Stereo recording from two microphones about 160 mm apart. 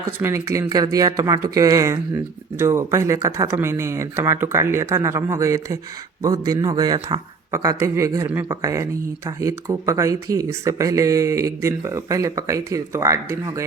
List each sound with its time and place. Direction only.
0.2 s speech: 15° right (ahead or behind)